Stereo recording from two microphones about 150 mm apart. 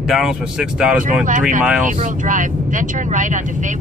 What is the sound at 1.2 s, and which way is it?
Speech, 60° right (ahead or behind).